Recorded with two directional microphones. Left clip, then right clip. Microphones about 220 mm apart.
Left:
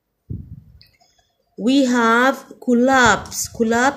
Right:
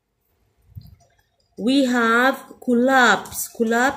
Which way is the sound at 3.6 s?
15° left (ahead or behind).